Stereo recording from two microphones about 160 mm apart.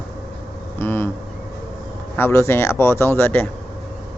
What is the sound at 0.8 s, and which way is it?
Vehicle, 15° left (ahead or behind).